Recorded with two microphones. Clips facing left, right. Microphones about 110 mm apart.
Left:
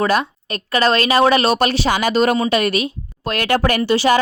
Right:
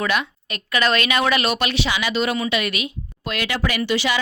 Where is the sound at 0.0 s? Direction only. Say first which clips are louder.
Left 5 dB; 35° left (ahead or behind).